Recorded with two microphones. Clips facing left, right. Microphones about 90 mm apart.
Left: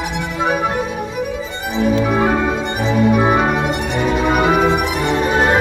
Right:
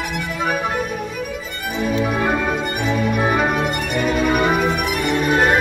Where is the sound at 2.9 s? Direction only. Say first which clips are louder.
Left 6 dB; 25° left (ahead or behind).